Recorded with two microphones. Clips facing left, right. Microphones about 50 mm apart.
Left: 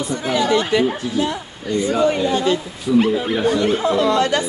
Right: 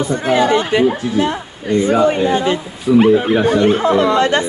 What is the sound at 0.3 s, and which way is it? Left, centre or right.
Speech, right.